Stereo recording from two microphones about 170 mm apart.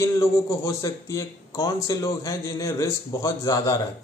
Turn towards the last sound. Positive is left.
turn(degrees=20)  # may be behind; listen again after turning